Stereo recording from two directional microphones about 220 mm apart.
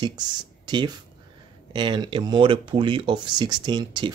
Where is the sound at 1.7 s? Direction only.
20° right (ahead or behind).